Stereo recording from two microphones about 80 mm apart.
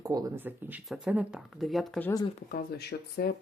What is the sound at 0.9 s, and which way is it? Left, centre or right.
Speech, centre.